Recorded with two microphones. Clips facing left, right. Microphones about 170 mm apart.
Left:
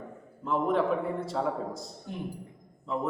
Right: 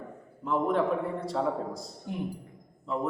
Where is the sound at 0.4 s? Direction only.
Centre (ahead or behind).